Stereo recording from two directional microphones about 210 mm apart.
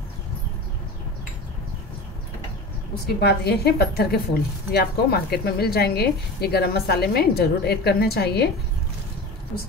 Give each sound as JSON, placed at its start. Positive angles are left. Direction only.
{"t": 3.2, "sound": "speech", "side_deg": 50}